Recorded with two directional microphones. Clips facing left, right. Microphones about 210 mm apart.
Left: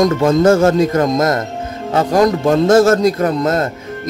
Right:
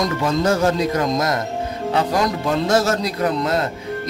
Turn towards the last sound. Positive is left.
turn(degrees=45)  # may be behind; listen again after turning